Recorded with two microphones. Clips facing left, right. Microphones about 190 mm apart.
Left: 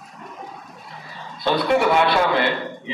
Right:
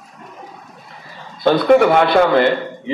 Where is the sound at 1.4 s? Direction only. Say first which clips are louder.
Right 7 dB; 50° right (ahead or behind).